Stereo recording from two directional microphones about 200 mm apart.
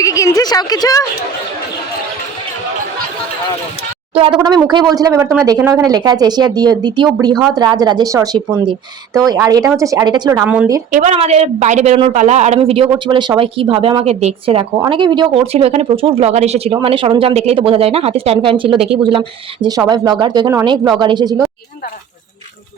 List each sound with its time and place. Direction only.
0.0 s a woman's voice: 15° left (ahead or behind)
4.1 s speech: 25° right (ahead or behind)
10.9 s a woman's voice: 35° right (ahead or behind)